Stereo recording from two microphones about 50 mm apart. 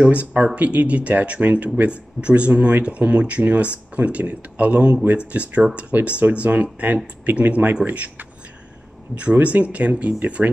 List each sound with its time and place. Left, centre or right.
0.0 s speech: right